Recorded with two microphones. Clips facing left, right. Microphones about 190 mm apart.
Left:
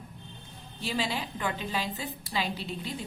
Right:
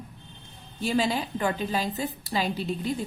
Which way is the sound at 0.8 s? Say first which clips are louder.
Right 6 dB; 45° right (ahead or behind).